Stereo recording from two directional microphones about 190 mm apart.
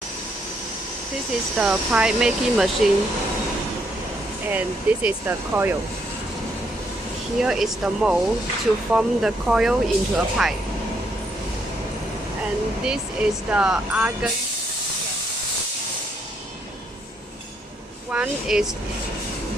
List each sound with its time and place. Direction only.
1.6 s speech: 5° right (ahead or behind)
4.5 s speech: 10° right (ahead or behind)
7.3 s speech: centre (ahead or behind)
12.8 s speech: 5° right (ahead or behind)
18.1 s speech: 5° right (ahead or behind)